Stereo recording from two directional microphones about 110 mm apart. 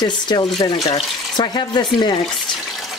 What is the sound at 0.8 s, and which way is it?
Speech, 60° left (ahead or behind).